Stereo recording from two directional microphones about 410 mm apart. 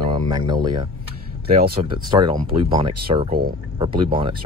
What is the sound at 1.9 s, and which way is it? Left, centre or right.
Speech, centre.